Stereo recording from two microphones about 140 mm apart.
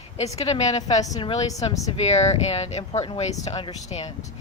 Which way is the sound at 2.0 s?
50° left (ahead or behind).